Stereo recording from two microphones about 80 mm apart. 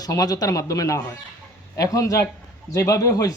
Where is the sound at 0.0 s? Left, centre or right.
Left.